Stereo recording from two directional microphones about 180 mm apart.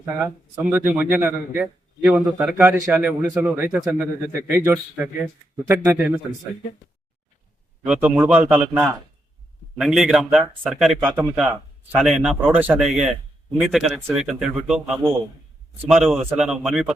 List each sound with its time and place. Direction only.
0.0 s a man's voice: 15° right (ahead or behind)
7.9 s a man's voice: 10° right (ahead or behind)